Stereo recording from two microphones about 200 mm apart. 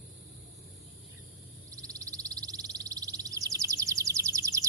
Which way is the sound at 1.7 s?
15° right (ahead or behind).